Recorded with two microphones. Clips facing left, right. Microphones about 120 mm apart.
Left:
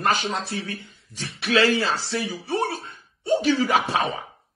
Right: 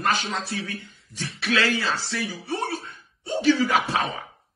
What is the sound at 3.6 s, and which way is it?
Speech, 30° left (ahead or behind).